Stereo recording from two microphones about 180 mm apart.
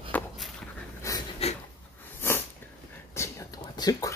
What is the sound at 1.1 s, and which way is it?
Pant, 15° left (ahead or behind).